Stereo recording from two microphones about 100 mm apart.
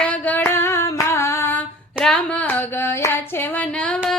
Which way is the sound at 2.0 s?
10° left (ahead or behind).